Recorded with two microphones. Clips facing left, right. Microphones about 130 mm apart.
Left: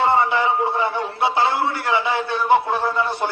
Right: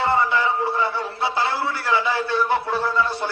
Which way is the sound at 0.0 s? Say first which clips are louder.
Left 2 dB; 20° left (ahead or behind).